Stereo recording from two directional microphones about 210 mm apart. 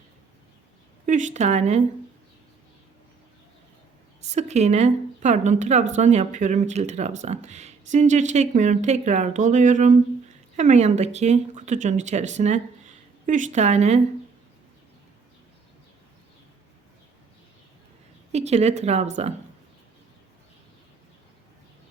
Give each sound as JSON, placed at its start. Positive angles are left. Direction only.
{"t": 1.0, "sound": "a woman's voice", "side_deg": -35}
{"t": 4.3, "sound": "a woman's voice", "side_deg": -35}
{"t": 18.3, "sound": "a woman's voice", "side_deg": -30}